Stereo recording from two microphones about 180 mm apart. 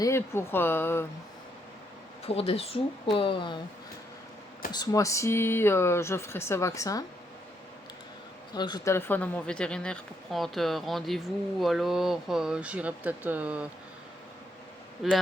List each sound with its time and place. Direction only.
0.0 s speech: 15° left (ahead or behind)
2.2 s a woman's voice: 35° left (ahead or behind)
4.7 s speech: 20° left (ahead or behind)
8.5 s speech: 25° left (ahead or behind); by 13.7 s 5° right (ahead or behind)
15.0 s speech: centre (ahead or behind)